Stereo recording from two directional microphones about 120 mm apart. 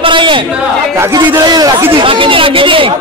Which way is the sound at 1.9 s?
45° right (ahead or behind).